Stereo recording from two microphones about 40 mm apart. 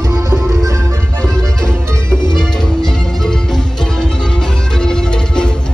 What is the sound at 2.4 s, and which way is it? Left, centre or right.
Music, centre.